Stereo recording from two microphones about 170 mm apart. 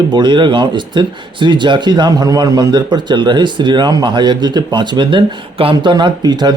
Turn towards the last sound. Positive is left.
turn(degrees=-25)  # may be behind; listen again after turning